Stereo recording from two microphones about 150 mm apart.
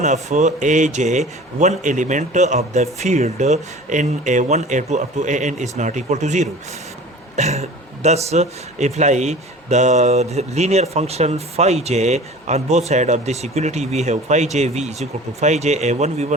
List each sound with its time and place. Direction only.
0.0 s speech: 50° right (ahead or behind)